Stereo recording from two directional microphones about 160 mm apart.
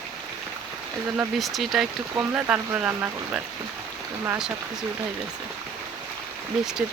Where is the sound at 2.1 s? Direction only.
20° right (ahead or behind).